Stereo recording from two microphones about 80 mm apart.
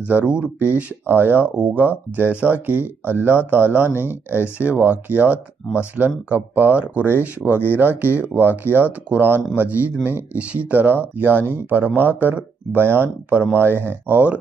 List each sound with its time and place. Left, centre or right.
0.0 s speech: centre